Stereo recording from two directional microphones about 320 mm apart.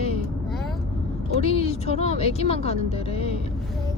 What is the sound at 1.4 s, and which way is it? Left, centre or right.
Speech, centre.